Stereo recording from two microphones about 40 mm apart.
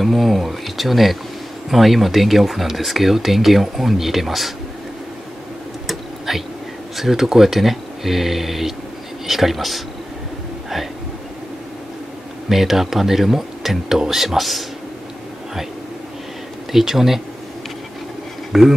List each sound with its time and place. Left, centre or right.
0.0 s speech: centre
5.9 s a sound: centre
7.0 s speech: centre
12.4 s speech: centre
16.7 s speech: centre
18.5 s speech: centre